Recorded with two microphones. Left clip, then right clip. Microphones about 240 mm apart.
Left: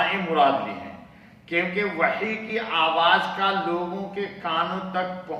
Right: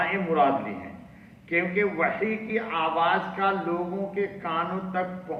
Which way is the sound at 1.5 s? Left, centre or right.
Left.